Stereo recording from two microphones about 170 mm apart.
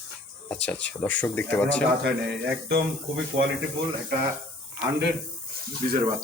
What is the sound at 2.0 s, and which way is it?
Speech, 85° right.